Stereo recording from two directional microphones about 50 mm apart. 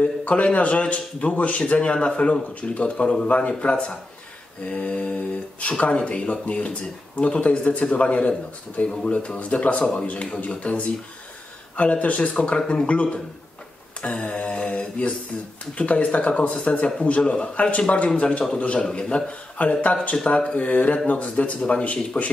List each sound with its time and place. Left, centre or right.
0.0 s a man's voice: left
12.5 s a man's voice: centre
14.0 s mantra: left
15.7 s a man's voice: left